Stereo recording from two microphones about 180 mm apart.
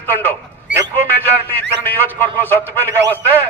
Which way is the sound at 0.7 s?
75° right (ahead or behind).